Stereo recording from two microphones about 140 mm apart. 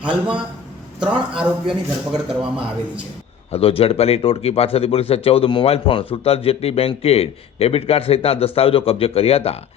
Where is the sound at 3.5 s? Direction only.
45° left (ahead or behind).